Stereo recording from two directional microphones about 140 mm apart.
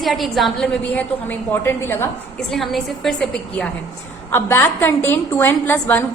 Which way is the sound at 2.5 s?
Centre (ahead or behind).